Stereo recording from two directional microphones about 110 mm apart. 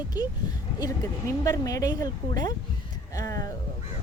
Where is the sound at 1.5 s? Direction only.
30° left (ahead or behind).